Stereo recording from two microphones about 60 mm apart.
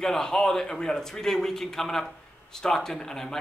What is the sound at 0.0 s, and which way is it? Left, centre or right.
A man's voice, centre.